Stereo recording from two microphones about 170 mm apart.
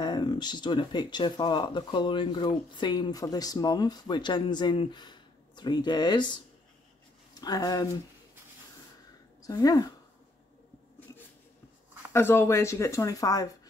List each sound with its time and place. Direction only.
0.0 s speech: 25° left (ahead or behind)
9.4 s speech: 20° left (ahead or behind)
12.1 s speech: 15° left (ahead or behind)